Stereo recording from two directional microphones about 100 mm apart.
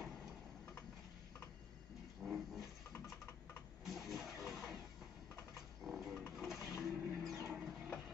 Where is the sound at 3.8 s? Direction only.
Centre (ahead or behind).